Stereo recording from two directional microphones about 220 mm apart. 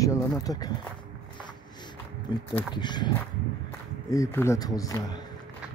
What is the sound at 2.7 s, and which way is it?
Speech, 20° left (ahead or behind).